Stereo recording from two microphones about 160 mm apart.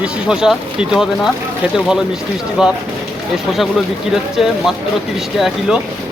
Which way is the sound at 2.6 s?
5° right (ahead or behind).